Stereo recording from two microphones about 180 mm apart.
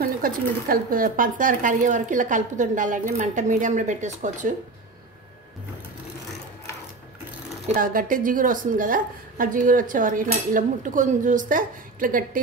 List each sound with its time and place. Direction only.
0.0 s a woman's voice: 55° right (ahead or behind)
7.6 s a woman's voice: 50° right (ahead or behind)